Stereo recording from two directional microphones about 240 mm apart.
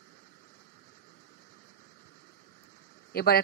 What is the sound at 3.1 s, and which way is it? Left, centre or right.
Speech, left.